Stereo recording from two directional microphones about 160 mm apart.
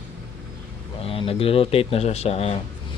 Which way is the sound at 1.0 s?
35° left (ahead or behind).